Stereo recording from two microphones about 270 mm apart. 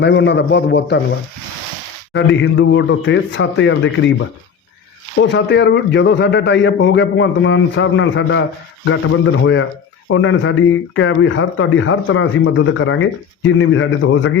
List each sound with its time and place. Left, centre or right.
0.0 s a man's voice: left
2.1 s speech: left
5.2 s a man's voice: left